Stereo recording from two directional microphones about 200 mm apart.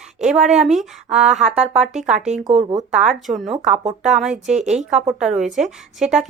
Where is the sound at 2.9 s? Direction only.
Centre (ahead or behind).